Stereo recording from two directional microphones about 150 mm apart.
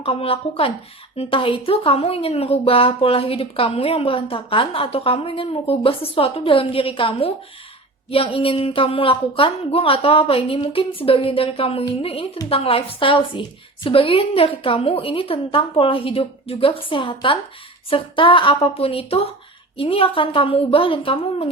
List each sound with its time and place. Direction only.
0.0 s a woman's voice: 40° left (ahead or behind)